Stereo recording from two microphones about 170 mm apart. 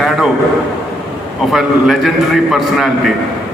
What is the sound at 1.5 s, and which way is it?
A man's voice, centre (ahead or behind).